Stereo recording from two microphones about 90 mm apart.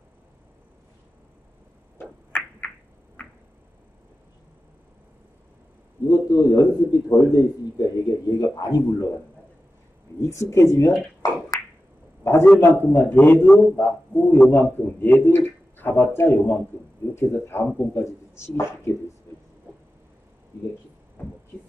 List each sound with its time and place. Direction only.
2.0 s finger snapping: 20° left (ahead or behind)
6.0 s a man's voice: 45° left (ahead or behind)
10.2 s speech: 35° left (ahead or behind)
12.2 s a sound: 30° left (ahead or behind)
12.5 s speech: 25° left (ahead or behind)